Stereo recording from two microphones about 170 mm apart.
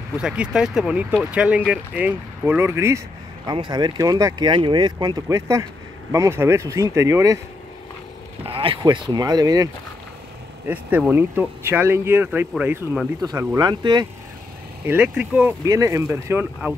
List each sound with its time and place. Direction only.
0.2 s speech: 5° right (ahead or behind)
8.5 s speech: 30° right (ahead or behind)
10.7 s speech: 10° right (ahead or behind)
13.2 s speech: 20° right (ahead or behind)
14.9 s speech: 10° right (ahead or behind)
15.6 s speech: 20° right (ahead or behind)